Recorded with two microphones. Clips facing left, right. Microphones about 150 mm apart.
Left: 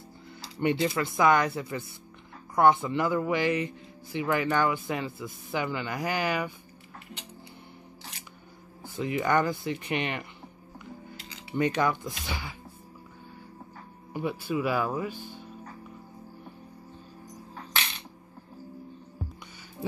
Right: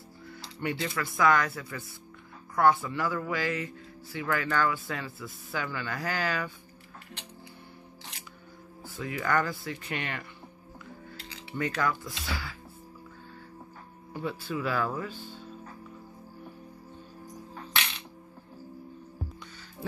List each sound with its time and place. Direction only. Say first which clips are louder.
0.3 s speech: left 6 dB; 25° left (ahead or behind)
8.8 s speech: left 4 dB; 20° left (ahead or behind)
11.5 s speech: left 4 dB; 20° left (ahead or behind)
14.1 s speech: left 4 dB; 15° left (ahead or behind)